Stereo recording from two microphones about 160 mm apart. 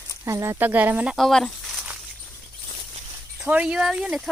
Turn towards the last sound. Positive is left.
turn(degrees=-5)  # may be behind; listen again after turning